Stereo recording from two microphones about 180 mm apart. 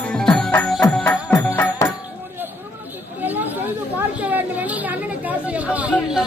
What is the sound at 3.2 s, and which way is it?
Chatter, 10° right (ahead or behind).